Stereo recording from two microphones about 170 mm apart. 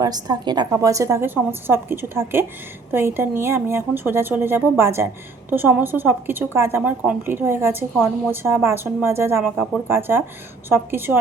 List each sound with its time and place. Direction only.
0.0 s a woman's voice: 25° right (ahead or behind)